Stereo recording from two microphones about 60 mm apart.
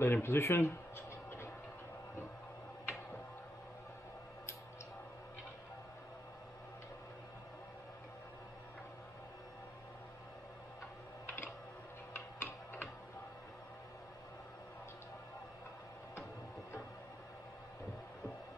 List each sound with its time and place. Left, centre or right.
0.0 s speech: left
12.1 s tick-tock: left